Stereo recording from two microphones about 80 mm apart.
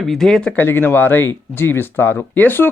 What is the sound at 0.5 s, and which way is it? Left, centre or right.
Speech, left.